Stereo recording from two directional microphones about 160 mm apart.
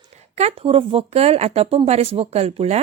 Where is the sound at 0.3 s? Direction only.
40° right (ahead or behind).